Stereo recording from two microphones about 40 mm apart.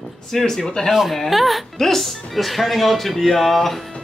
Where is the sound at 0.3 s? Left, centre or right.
Centre.